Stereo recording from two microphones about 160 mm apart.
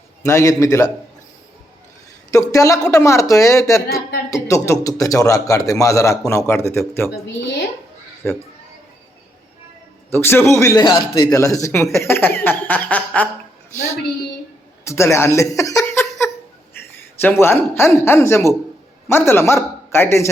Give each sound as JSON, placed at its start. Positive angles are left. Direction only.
{"t": 0.2, "sound": "a man's voice", "side_deg": 20}
{"t": 2.3, "sound": "a man's voice", "side_deg": 20}
{"t": 10.1, "sound": "speech", "side_deg": 15}
{"t": 14.8, "sound": "a sound", "side_deg": 15}
{"t": 17.4, "sound": "a man's voice", "side_deg": 15}